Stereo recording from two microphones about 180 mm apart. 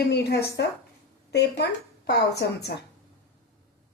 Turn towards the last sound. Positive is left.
turn(degrees=65)  # may be behind; listen again after turning